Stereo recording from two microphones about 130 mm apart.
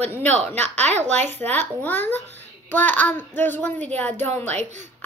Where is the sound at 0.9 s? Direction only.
60° right (ahead or behind).